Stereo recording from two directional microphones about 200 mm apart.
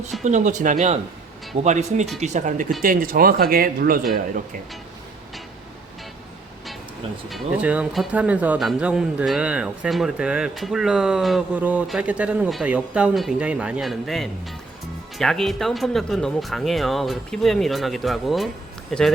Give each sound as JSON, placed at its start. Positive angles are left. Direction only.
{"t": 0.3, "sound": "speech", "side_deg": -40}
{"t": 7.3, "sound": "speech", "side_deg": -5}